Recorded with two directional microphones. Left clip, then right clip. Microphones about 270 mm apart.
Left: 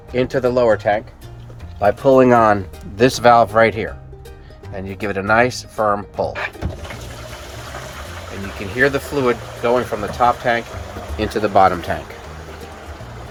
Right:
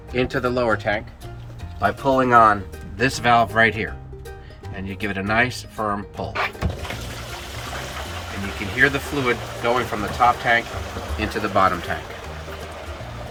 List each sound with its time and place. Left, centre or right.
0.1 s speech: left
1.8 s speech: left
3.0 s speech: left
8.7 s speech: centre